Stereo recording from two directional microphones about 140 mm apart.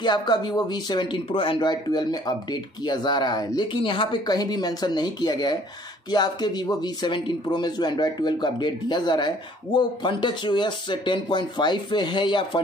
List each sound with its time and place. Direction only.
0.0 s speech: 30° left (ahead or behind)